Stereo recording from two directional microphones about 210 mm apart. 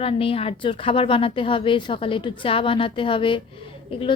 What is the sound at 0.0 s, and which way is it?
A woman's voice, 25° left (ahead or behind).